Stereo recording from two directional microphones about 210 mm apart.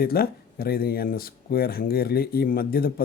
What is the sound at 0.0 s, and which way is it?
Speech, 45° left (ahead or behind).